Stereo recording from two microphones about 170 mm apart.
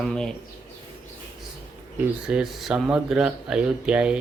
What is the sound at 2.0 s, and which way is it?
Speech, 5° right (ahead or behind).